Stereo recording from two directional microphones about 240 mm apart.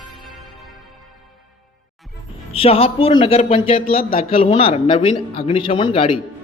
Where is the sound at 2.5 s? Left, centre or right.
Left.